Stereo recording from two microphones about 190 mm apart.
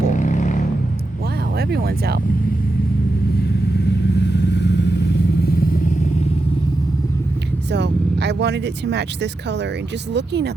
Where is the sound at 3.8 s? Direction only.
65° left (ahead or behind).